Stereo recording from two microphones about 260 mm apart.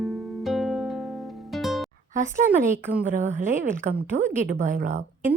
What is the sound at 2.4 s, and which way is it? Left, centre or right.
Speech, centre.